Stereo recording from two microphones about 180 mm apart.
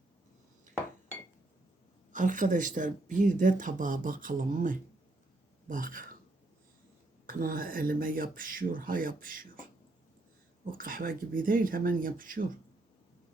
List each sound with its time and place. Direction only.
2.1 s speech: 45° right (ahead or behind)
7.3 s speech: 50° right (ahead or behind)
10.7 s speech: 50° right (ahead or behind)